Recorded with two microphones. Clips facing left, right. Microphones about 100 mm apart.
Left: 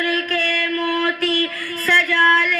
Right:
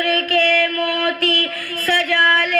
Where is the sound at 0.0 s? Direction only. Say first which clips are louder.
Right 4 dB; 60° right (ahead or behind).